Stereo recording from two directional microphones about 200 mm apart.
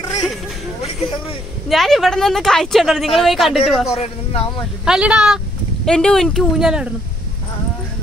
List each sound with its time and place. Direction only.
1.7 s speech: centre (ahead or behind)
3.9 s speech: 30° left (ahead or behind)
4.8 s speech: 5° right (ahead or behind)